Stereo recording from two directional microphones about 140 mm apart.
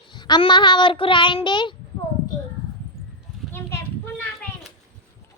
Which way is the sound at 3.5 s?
15° left (ahead or behind).